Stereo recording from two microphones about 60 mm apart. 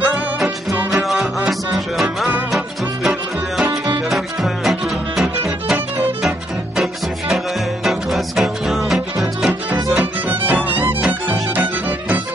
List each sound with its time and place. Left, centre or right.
0.0 s music: centre
7.8 s music: centre
10.4 s music: right